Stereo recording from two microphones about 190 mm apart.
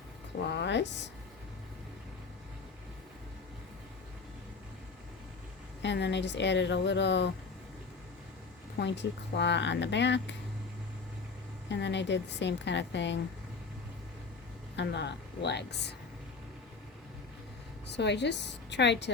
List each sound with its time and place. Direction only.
0.4 s speech: 65° left (ahead or behind)
5.8 s speech: 65° left (ahead or behind)
8.8 s speech: 65° left (ahead or behind)
11.7 s speech: 70° left (ahead or behind)
14.8 s a woman's voice: 65° left (ahead or behind)
17.8 s a woman's voice: 65° left (ahead or behind)